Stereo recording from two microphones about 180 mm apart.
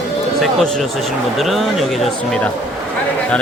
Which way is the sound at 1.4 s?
Centre (ahead or behind).